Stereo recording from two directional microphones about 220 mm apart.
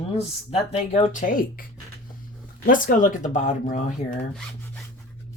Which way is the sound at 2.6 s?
40° left (ahead or behind).